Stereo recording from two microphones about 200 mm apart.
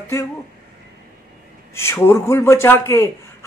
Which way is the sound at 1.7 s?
15° left (ahead or behind).